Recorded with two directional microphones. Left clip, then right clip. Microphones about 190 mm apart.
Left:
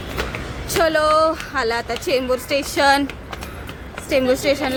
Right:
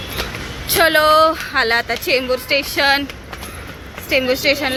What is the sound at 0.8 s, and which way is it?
A woman's voice, centre (ahead or behind).